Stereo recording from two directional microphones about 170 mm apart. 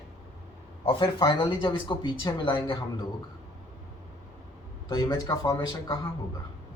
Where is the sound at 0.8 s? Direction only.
30° left (ahead or behind).